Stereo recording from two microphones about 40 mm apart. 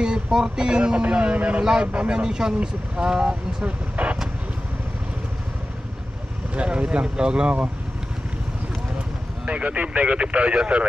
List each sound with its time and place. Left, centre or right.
0.0 s speech: centre
1.6 s speech: centre
3.9 s speech: right
6.5 s speech: right
9.5 s speech: right